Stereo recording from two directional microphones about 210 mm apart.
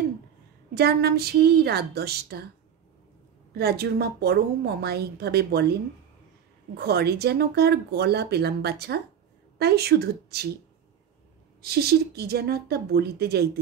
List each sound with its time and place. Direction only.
0.7 s speech: 50° right (ahead or behind)
3.5 s speech: 50° right (ahead or behind)
6.8 s speech: 50° right (ahead or behind)
11.6 s speech: 50° right (ahead or behind)